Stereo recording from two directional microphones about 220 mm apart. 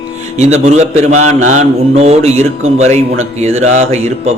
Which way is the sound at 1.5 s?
30° right (ahead or behind).